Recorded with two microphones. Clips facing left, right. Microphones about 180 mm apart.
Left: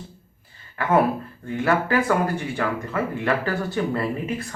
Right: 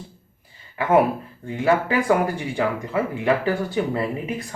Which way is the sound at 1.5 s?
15° right (ahead or behind).